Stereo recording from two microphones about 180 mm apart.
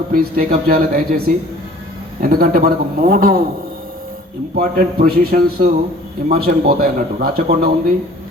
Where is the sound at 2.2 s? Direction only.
55° right (ahead or behind).